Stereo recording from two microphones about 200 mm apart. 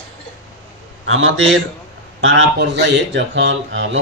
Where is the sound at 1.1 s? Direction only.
75° right (ahead or behind).